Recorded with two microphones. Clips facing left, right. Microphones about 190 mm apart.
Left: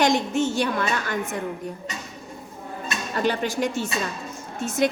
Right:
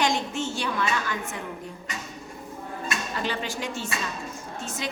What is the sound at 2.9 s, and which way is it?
Speech, 50° left (ahead or behind).